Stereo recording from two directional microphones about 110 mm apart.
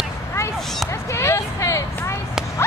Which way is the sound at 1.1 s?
25° left (ahead or behind).